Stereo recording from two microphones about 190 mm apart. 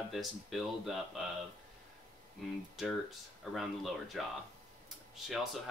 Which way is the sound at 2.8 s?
Centre (ahead or behind).